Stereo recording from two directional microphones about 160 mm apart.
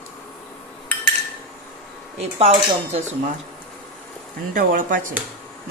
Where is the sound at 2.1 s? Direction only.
40° right (ahead or behind).